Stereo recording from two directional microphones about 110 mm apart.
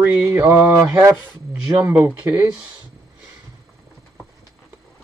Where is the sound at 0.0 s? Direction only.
10° right (ahead or behind).